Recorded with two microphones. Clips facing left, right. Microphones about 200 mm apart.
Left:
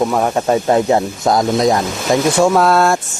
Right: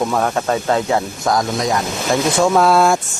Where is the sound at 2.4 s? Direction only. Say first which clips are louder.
Right 1 dB; centre (ahead or behind).